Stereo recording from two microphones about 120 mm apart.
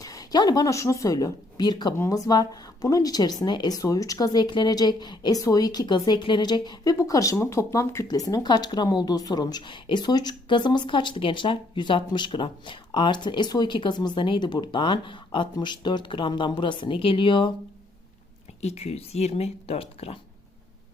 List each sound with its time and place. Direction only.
0.0 s speech: 30° left (ahead or behind)
18.6 s speech: 60° left (ahead or behind)